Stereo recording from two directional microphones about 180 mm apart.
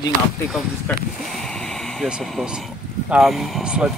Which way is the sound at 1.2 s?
Centre (ahead or behind).